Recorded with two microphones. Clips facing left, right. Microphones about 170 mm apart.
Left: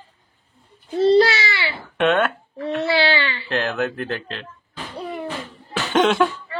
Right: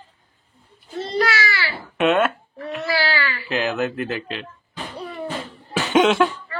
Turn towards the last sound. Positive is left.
turn(degrees=0)  # may be behind; listen again after turning